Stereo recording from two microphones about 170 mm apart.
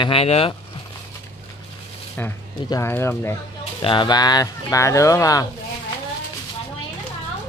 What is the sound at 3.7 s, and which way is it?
Speech, 25° left (ahead or behind).